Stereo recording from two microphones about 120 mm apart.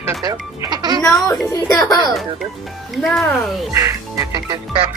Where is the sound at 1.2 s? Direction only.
30° left (ahead or behind).